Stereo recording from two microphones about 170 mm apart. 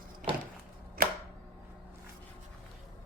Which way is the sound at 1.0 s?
55° right (ahead or behind).